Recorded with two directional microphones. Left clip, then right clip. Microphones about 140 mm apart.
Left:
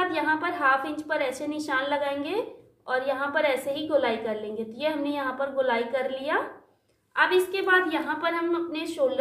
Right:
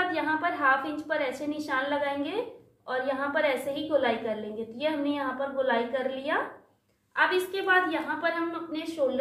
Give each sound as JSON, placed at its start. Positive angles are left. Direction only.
{"t": 0.0, "sound": "a woman's voice", "side_deg": 25}